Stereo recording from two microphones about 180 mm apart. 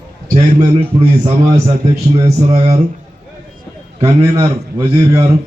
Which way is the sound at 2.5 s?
35° right (ahead or behind).